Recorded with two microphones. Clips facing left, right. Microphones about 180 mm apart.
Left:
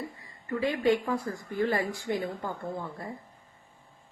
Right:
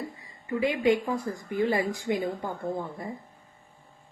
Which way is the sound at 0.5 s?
15° right (ahead or behind).